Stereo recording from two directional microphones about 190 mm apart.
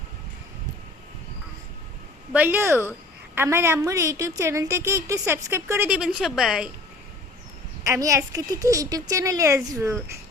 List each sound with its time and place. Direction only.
2.3 s a woman's voice: 10° right (ahead or behind)
7.9 s a woman's voice: 15° right (ahead or behind)